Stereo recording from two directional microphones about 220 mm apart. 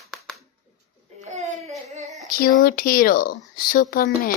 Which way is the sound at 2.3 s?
40° left (ahead or behind).